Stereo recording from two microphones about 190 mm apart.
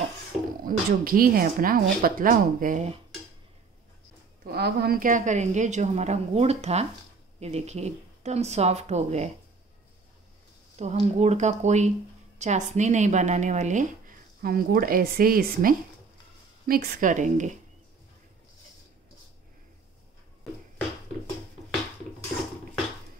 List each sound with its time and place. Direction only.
0.7 s speech: 50° right (ahead or behind)
4.5 s speech: 55° right (ahead or behind); by 9.3 s 35° right (ahead or behind)
10.8 s speech: 35° right (ahead or behind)